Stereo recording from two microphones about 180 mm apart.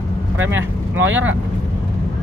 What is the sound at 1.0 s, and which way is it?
Speech, 90° right.